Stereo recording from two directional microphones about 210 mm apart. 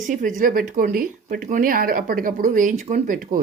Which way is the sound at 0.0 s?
40° right (ahead or behind).